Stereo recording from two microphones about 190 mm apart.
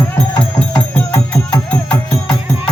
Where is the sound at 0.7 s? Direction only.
5° left (ahead or behind).